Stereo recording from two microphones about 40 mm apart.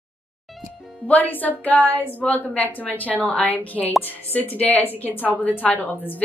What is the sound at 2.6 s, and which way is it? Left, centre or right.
A woman's voice, left.